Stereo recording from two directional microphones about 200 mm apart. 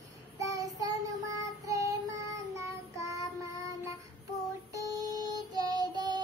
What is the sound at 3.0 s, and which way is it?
Child singing, 15° right (ahead or behind).